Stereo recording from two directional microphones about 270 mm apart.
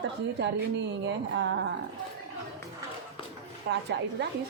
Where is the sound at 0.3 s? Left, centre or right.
Right.